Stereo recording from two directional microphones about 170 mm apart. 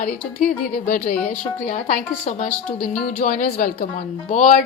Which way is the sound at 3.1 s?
55° left (ahead or behind).